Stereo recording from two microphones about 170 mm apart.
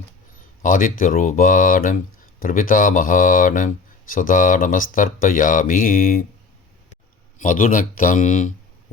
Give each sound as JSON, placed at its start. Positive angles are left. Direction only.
{"t": 0.6, "sound": "speech", "side_deg": 50}
{"t": 7.3, "sound": "speech", "side_deg": 50}